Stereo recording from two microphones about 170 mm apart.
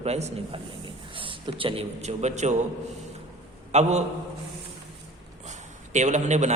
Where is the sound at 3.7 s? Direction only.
40° right (ahead or behind).